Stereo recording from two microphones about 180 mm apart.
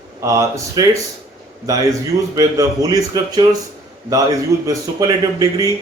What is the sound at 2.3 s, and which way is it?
A man's voice, 20° right (ahead or behind).